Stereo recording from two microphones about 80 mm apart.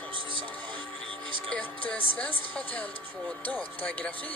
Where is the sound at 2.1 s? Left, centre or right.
Centre.